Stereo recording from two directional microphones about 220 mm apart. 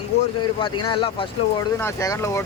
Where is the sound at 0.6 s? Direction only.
25° left (ahead or behind).